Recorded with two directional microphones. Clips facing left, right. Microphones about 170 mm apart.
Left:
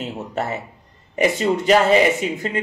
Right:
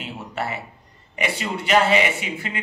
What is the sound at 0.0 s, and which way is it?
A man's voice, 40° left (ahead or behind).